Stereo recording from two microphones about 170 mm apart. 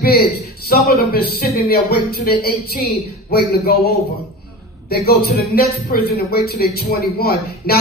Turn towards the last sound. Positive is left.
turn(degrees=65)  # may be behind; listen again after turning